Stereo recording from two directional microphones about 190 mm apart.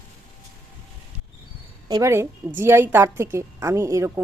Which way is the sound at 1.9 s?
15° right (ahead or behind).